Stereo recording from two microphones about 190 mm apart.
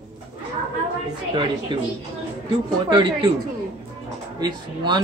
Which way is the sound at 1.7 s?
25° right (ahead or behind).